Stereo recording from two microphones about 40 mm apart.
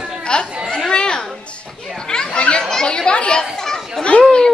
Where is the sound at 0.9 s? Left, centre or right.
Left.